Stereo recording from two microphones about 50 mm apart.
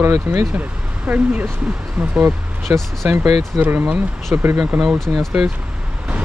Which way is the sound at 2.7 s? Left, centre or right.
Right.